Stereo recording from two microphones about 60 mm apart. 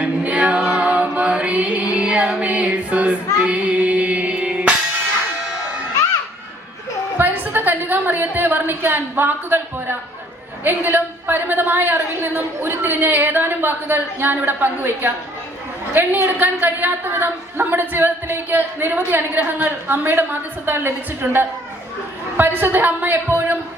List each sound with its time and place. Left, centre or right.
0.0 s music: right
7.2 s a sound: right
10.6 s a woman's voice: right